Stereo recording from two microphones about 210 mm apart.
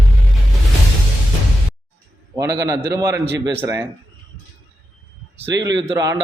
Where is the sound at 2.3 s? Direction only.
15° right (ahead or behind).